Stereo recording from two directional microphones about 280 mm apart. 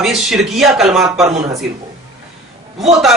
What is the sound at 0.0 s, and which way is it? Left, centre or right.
Speech, centre.